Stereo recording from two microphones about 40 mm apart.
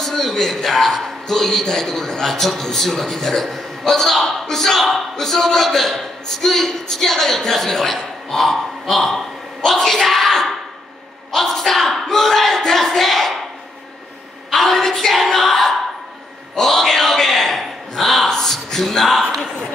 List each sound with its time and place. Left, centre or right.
0.0 s a man's voice: centre
14.5 s speech: centre
16.5 s a sound: centre